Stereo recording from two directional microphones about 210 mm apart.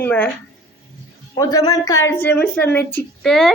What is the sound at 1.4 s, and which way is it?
Speech, 15° left (ahead or behind).